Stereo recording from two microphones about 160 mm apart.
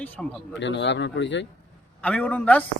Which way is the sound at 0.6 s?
90° left.